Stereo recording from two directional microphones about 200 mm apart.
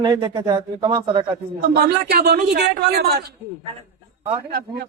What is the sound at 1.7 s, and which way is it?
A man's voice, 50° right (ahead or behind).